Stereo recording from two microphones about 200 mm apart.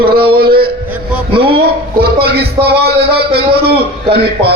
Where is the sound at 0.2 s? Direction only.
50° right (ahead or behind).